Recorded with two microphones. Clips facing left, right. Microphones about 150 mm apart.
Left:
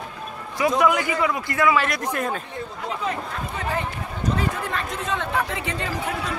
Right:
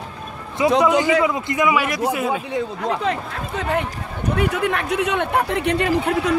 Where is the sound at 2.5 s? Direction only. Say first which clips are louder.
Right 8 dB; 75° right (ahead or behind).